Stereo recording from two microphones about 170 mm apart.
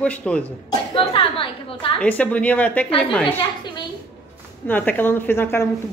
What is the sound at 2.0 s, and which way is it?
Speech, 10° left (ahead or behind).